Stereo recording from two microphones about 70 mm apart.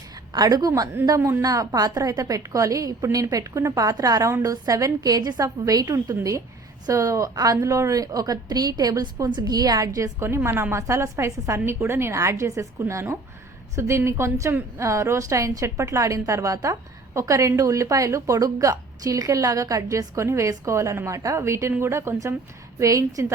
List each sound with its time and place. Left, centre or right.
0.3 s a woman's voice: right
1.0 s a woman's voice: right
1.4 s a woman's voice: right
6.8 s a woman's voice: right
7.3 s a woman's voice: right
10.2 s a woman's voice: right
22.8 s a woman's voice: right